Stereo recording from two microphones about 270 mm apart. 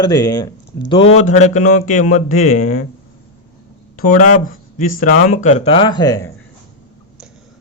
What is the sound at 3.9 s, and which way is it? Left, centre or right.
Speech, left.